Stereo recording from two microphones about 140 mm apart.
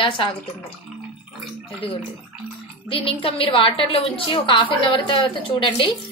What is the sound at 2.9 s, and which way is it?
A woman's voice, 40° left (ahead or behind).